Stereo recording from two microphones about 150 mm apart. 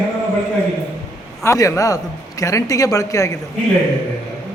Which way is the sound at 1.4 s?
20° left (ahead or behind).